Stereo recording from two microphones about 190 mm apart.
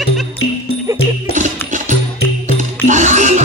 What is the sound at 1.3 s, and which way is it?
Music, 40° right (ahead or behind).